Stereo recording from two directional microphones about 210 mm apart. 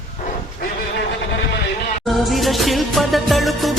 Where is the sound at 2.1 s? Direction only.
Centre (ahead or behind).